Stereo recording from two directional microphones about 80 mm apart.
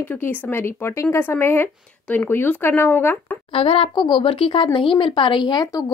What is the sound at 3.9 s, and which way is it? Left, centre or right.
Speech, left.